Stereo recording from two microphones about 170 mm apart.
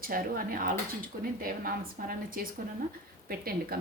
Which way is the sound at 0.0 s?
55° right (ahead or behind).